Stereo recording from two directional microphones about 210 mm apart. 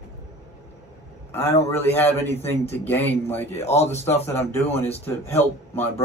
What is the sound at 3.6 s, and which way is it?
Speech, 30° left (ahead or behind).